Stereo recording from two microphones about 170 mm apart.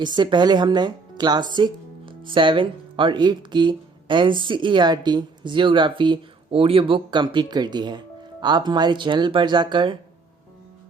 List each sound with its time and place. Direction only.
0.0 s speech: 25° right (ahead or behind)